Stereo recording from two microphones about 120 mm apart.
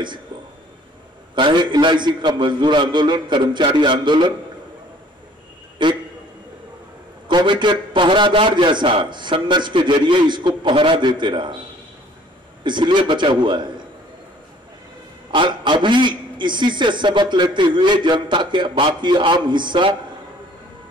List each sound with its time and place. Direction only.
1.3 s a man's voice: 40° right (ahead or behind)
5.8 s a man's voice: 40° right (ahead or behind)
7.2 s a man's voice: 40° right (ahead or behind)
12.6 s a man's voice: 40° right (ahead or behind)
15.3 s a man's voice: 40° right (ahead or behind)